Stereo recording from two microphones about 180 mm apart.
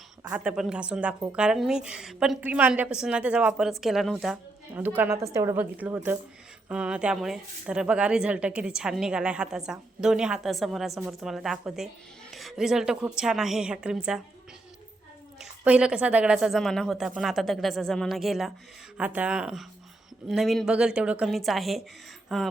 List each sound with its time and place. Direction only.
0.3 s a woman's voice: 5° right (ahead or behind)
15.4 s a woman's voice: 5° right (ahead or behind)